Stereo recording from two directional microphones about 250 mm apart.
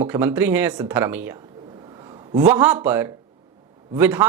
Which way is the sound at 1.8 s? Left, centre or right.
Centre.